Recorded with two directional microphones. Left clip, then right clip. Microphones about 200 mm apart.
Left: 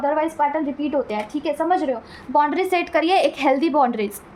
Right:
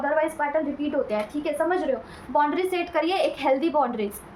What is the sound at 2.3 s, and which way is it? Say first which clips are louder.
A woman's voice: left 4 dB; 35° left (ahead or behind).